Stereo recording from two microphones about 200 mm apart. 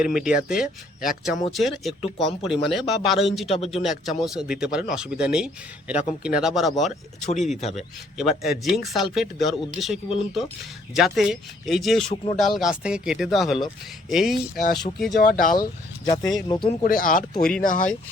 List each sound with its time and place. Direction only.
0.0 s speech: 5° right (ahead or behind)
7.6 s a man's voice: 35° left (ahead or behind)
8.2 s speech: centre (ahead or behind)
14.5 s speech: 50° left (ahead or behind)
16.0 s speech: 20° left (ahead or behind)
16.8 s speech: 45° left (ahead or behind)